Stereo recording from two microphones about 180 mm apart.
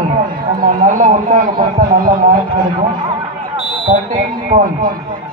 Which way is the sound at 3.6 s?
Centre (ahead or behind).